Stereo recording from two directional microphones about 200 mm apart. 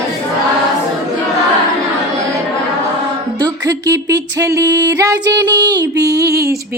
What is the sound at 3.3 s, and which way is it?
Music, 20° right (ahead or behind).